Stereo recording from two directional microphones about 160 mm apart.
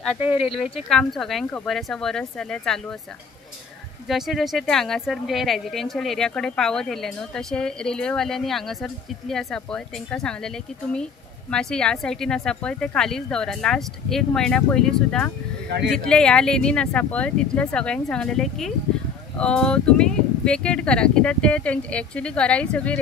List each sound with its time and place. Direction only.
0.4 s speech: 35° left (ahead or behind)
0.8 s speech: 5° left (ahead or behind)
4.1 s speech: centre (ahead or behind)